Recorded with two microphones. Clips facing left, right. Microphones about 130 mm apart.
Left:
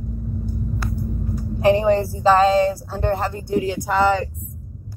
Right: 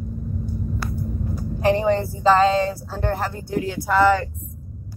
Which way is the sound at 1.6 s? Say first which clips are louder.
Left 3 dB; 15° left (ahead or behind).